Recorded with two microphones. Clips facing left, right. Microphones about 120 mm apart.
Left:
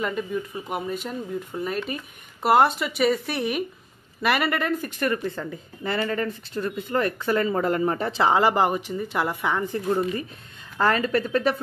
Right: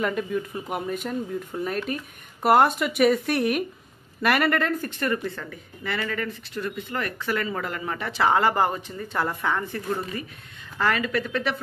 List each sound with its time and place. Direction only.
0.0 s speech: centre (ahead or behind); by 8.3 s 35° left (ahead or behind)
8.3 s speech: 20° left (ahead or behind)
10.8 s speech: 30° left (ahead or behind)